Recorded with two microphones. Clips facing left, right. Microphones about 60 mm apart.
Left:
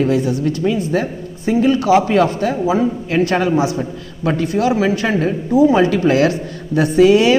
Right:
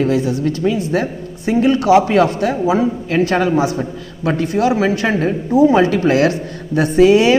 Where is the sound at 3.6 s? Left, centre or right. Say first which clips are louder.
Right 1 dB; right.